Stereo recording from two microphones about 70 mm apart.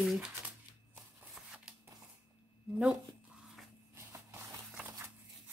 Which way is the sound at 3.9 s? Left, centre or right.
Right.